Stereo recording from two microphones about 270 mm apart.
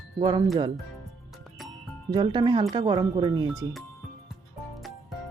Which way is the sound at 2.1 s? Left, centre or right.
Centre.